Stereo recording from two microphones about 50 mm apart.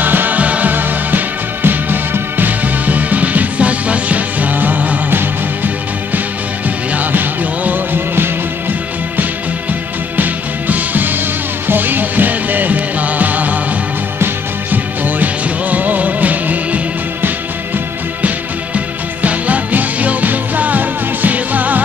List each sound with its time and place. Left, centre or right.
0.0 s music: right
6.9 s music: right
10.1 s music: right
19.2 s music: right